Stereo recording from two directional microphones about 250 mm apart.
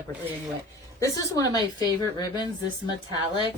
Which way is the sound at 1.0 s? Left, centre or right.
Centre.